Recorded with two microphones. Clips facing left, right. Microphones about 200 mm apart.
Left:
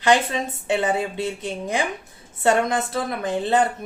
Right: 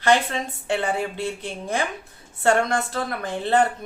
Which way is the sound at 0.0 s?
15° left (ahead or behind).